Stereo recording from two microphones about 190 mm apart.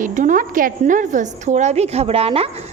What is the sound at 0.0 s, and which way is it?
A woman's voice, 40° right (ahead or behind).